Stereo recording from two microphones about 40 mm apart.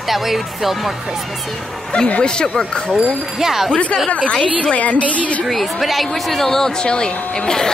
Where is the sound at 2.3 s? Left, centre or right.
Centre.